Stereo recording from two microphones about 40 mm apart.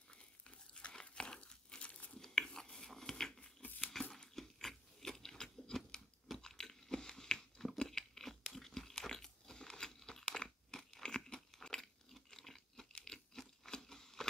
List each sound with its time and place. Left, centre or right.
0.1 s crumpling: left
2.1 s chewing: centre
3.8 s crumpling: centre
4.4 s a sound: centre
6.4 s crunch: centre
11.6 s chewing: centre
12.9 s a sound: centre